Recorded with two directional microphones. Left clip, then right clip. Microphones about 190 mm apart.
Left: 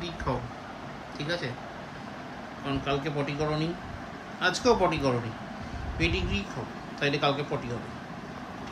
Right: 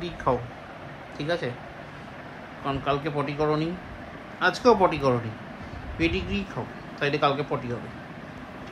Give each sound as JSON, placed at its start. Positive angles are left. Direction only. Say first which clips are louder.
{"t": 1.2, "sound": "speech", "louder": "right 4 dB", "side_deg": -25}
{"t": 2.6, "sound": "speech", "louder": "right 4 dB", "side_deg": -15}